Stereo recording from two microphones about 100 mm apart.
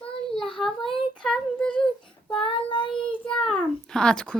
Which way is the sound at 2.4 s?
60° left (ahead or behind).